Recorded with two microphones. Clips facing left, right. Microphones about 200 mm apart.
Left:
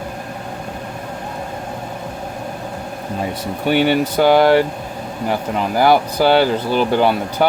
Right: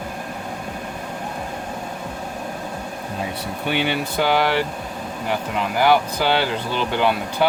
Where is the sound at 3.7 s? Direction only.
45° left (ahead or behind).